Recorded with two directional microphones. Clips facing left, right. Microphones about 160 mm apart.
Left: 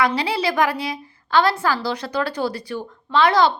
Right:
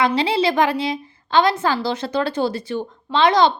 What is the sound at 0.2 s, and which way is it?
A woman's voice, 25° right (ahead or behind).